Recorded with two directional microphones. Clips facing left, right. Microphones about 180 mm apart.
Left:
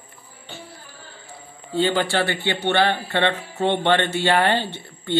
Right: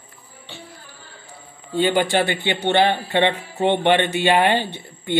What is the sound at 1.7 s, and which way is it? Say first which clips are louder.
A man's voice: right 2 dB; 15° right (ahead or behind).